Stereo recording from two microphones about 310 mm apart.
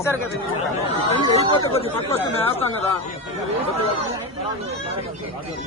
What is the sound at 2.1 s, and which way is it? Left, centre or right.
Speech, centre.